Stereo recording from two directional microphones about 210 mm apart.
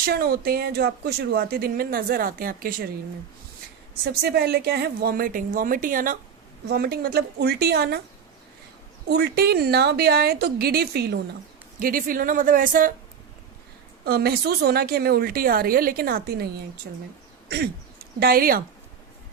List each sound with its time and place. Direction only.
0.0 s speech: 45° right (ahead or behind)
4.0 s speech: 50° right (ahead or behind)
9.0 s speech: 50° right (ahead or behind)
14.0 s speech: 50° right (ahead or behind)
18.2 s speech: 45° right (ahead or behind)